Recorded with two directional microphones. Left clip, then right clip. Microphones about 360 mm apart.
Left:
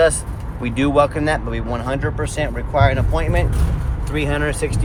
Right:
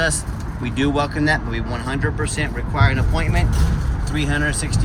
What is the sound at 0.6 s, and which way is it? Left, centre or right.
Speech, centre.